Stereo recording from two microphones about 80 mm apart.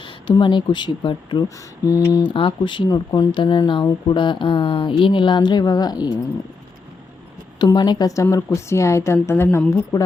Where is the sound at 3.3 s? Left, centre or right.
Left.